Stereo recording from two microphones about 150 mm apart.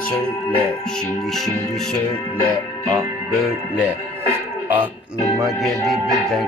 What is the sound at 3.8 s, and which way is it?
Speech, 15° right (ahead or behind).